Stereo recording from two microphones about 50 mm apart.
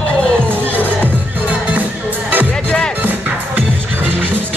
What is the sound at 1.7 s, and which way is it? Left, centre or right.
Music, right.